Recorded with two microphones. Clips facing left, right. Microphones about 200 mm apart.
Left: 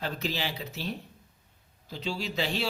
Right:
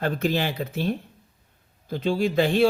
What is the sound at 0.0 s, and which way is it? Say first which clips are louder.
Speech: right 9 dB; 50° right (ahead or behind).